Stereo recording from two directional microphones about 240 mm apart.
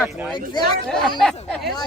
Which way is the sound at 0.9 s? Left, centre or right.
Centre.